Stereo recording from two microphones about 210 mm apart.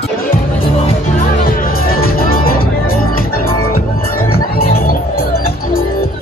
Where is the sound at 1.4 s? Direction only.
45° left (ahead or behind).